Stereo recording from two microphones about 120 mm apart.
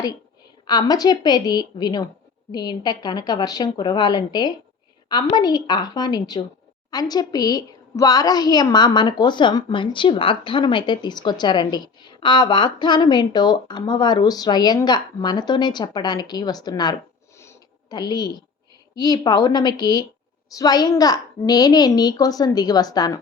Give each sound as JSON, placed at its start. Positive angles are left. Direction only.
{"t": 0.7, "sound": "a woman's voice", "side_deg": 35}
{"t": 17.3, "sound": "sniff", "side_deg": 25}
{"t": 17.9, "sound": "a woman's voice", "side_deg": 35}